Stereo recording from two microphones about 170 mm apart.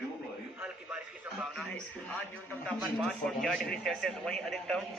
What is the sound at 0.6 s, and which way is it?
A man's voice, 5° right (ahead or behind).